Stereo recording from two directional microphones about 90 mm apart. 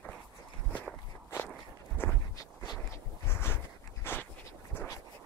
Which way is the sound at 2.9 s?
30° left (ahead or behind).